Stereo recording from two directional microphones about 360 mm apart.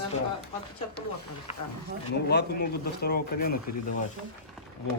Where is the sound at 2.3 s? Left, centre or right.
Left.